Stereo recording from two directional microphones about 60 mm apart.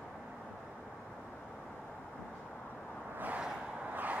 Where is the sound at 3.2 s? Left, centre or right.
Right.